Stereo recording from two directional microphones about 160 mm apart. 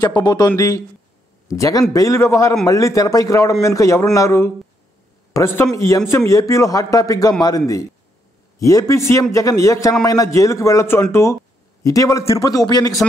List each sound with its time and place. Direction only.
0.0 s a man's voice: 25° left (ahead or behind)